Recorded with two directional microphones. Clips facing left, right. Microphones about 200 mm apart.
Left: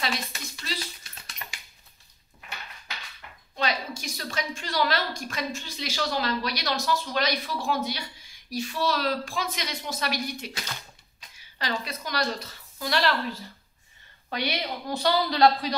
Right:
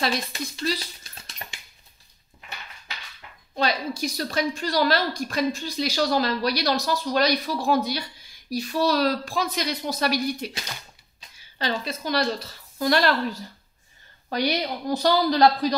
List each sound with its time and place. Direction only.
0.0 s a woman's voice: 30° right (ahead or behind)
3.5 s a woman's voice: 35° right (ahead or behind)
12.7 s a woman's voice: 45° right (ahead or behind)